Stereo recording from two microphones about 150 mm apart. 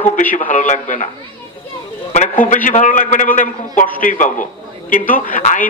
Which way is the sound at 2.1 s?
55° left (ahead or behind).